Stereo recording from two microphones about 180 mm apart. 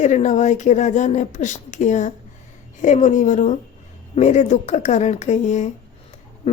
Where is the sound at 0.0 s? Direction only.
40° left (ahead or behind).